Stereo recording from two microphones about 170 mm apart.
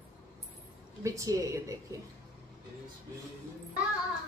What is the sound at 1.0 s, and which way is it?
A woman's voice, 20° right (ahead or behind).